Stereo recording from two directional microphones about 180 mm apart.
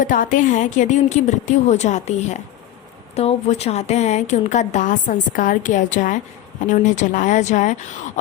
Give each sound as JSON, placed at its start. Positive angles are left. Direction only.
{"t": 0.0, "sound": "a woman's voice", "side_deg": 50}